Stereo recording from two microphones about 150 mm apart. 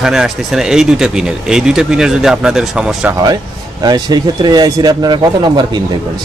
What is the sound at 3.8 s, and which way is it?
Speech, 25° right (ahead or behind).